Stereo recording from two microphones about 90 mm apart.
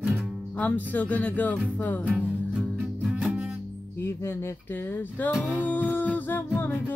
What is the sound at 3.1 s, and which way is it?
Music, 5° right (ahead or behind).